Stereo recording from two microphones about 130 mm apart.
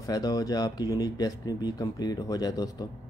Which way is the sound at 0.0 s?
30° left (ahead or behind).